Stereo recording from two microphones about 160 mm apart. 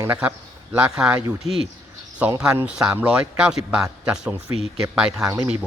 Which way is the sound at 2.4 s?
5° right (ahead or behind).